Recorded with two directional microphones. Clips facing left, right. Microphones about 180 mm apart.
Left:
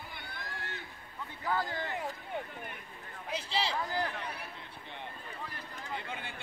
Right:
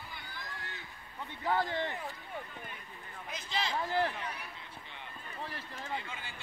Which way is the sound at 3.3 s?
30° left (ahead or behind).